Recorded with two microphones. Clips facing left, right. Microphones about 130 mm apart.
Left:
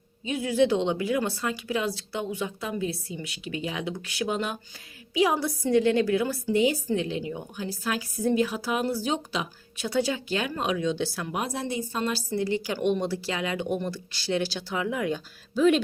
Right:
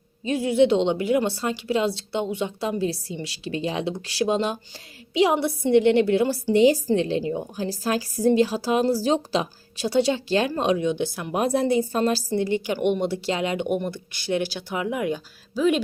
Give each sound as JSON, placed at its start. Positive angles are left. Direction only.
{"t": 0.3, "sound": "a woman's voice", "side_deg": -30}
{"t": 10.8, "sound": "speech", "side_deg": -20}
{"t": 11.3, "sound": "a woman's voice", "side_deg": -60}
{"t": 12.4, "sound": "speech", "side_deg": -20}